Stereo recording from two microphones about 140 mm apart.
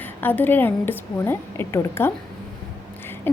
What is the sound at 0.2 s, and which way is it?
A woman's voice, 15° left (ahead or behind).